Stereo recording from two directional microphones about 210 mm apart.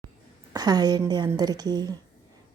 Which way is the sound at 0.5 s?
20° right (ahead or behind).